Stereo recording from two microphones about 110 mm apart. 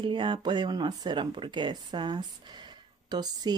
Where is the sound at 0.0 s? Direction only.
50° right (ahead or behind).